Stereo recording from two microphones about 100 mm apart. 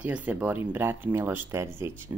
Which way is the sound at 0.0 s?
15° right (ahead or behind).